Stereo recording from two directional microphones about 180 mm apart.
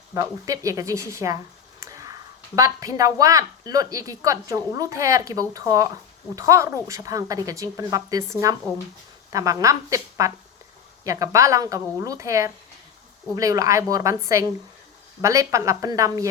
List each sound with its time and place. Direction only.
0.1 s a woman's voice: 20° right (ahead or behind)
1.8 s a sound: 20° right (ahead or behind)
2.6 s a woman's voice: 20° right (ahead or behind)